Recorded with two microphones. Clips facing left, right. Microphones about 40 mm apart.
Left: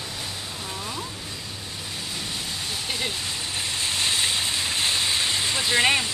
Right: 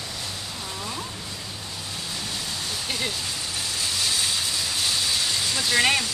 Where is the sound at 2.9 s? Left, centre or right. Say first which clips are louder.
Even; left.